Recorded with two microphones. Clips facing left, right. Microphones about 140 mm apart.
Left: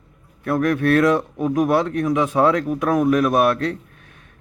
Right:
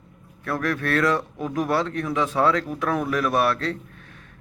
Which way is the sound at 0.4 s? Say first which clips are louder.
Left 7 dB; 20° left (ahead or behind).